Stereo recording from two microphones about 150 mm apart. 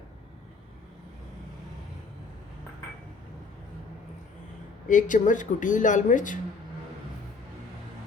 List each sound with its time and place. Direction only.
4.9 s speech: 60° left (ahead or behind)